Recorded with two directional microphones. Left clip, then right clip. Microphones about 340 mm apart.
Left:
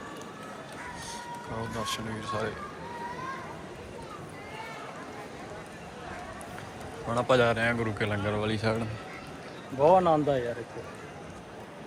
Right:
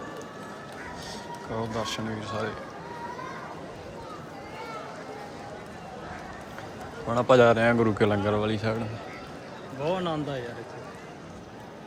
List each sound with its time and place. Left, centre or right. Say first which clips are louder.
1.7 s speech: right 2 dB; centre
7.1 s speech: right 5 dB; centre
9.9 s a man's voice: left 6 dB; centre